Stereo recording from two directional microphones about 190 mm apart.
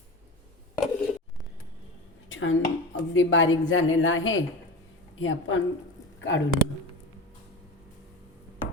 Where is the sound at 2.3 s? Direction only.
90° left.